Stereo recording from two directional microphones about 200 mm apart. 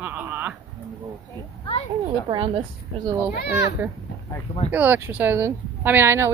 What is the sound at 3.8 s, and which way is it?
Speech, 10° right (ahead or behind).